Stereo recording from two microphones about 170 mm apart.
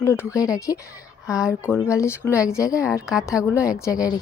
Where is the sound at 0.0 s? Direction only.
15° left (ahead or behind).